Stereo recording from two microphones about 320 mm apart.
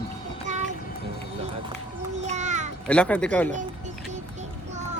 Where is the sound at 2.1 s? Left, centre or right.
Right.